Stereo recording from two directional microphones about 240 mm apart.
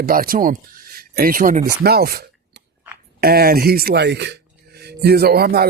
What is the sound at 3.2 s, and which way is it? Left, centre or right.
Speech, right.